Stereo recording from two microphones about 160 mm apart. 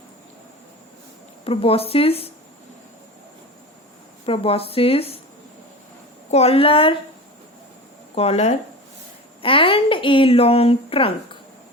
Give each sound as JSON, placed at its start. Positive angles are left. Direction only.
{"t": 1.5, "sound": "a woman's voice", "side_deg": 35}
{"t": 4.3, "sound": "a woman's voice", "side_deg": 35}
{"t": 6.3, "sound": "a woman's voice", "side_deg": 35}
{"t": 8.1, "sound": "a woman's voice", "side_deg": 40}